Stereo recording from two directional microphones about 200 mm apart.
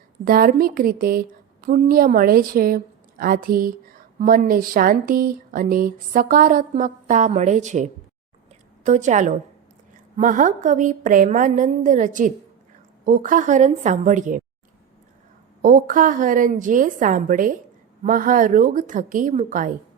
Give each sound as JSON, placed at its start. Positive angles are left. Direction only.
{"t": 0.3, "sound": "a woman's voice", "side_deg": -45}
{"t": 15.6, "sound": "a woman's voice", "side_deg": -45}